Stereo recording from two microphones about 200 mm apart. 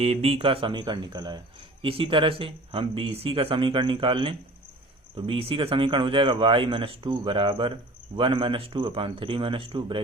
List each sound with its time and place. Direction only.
0.0 s speech: 30° right (ahead or behind)